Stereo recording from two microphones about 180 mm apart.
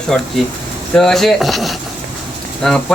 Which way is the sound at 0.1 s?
Centre (ahead or behind).